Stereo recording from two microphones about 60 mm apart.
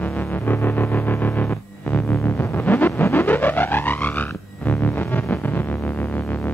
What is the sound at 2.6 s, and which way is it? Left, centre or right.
Music, left.